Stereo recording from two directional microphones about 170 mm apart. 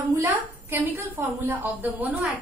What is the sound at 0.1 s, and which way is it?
A woman's voice, 15° right (ahead or behind).